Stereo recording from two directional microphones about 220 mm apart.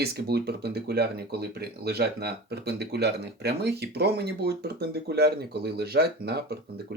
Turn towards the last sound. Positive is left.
turn(degrees=-45)  # may be behind; listen again after turning